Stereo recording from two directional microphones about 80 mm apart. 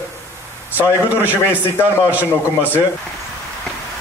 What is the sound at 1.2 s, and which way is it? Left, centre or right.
A man's voice, centre.